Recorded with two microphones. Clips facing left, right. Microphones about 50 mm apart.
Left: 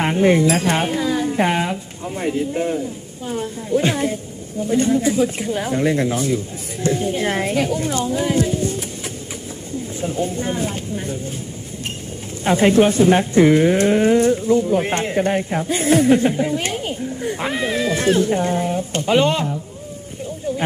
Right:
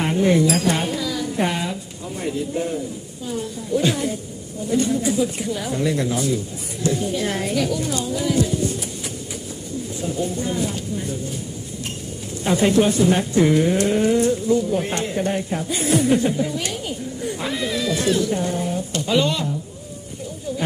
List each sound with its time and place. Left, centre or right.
0.0 s speech: left
10.0 s speech: left
12.5 s speech: left